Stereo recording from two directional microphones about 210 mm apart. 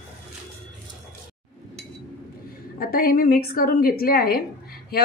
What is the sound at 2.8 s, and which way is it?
A woman's voice, 45° left (ahead or behind).